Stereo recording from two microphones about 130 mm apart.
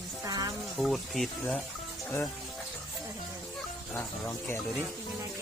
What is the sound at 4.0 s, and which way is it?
Speech, 20° left (ahead or behind).